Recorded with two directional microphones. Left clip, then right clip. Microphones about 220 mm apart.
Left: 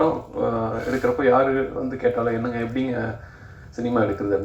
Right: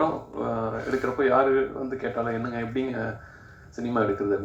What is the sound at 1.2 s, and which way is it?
Speech, 45° right (ahead or behind).